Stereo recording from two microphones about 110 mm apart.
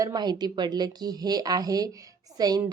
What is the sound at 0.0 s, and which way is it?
Speech, 40° right (ahead or behind).